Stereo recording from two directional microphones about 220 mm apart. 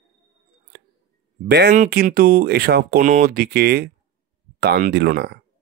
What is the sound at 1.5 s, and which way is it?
Speech, 45° right (ahead or behind).